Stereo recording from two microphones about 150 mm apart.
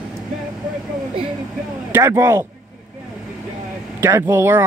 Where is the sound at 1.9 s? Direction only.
15° right (ahead or behind).